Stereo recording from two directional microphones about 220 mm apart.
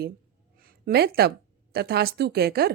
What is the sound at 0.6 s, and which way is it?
A woman's voice, 40° right (ahead or behind).